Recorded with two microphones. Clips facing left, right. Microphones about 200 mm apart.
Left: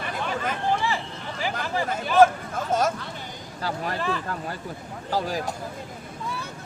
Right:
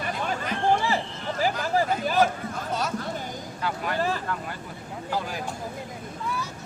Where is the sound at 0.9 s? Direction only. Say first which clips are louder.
Right 2 dB; 40° right (ahead or behind).